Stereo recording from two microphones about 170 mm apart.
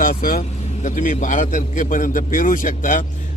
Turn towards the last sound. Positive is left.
turn(degrees=50)  # may be behind; listen again after turning